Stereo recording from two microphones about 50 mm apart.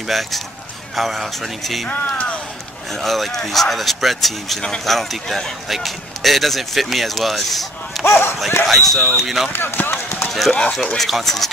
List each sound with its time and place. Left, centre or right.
0.1 s speech: centre
1.9 s speech: left
2.9 s speech: centre
8.0 s speech: left
8.6 s speech: centre
9.5 s speech: left
10.2 s run: centre
11.0 s speech: centre